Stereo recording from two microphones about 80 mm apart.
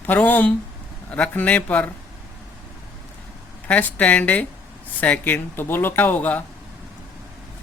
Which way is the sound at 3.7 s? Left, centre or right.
Centre.